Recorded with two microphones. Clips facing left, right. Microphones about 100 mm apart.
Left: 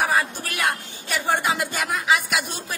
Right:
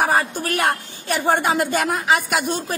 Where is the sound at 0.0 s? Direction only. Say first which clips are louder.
Right 3 dB; 45° right (ahead or behind).